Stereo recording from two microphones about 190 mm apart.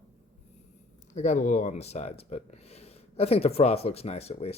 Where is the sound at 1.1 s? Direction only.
40° left (ahead or behind).